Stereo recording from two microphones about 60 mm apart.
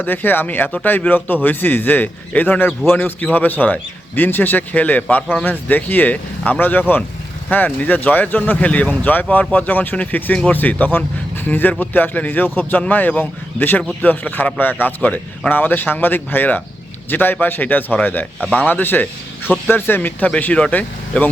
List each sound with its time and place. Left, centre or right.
0.0 s a man's voice: left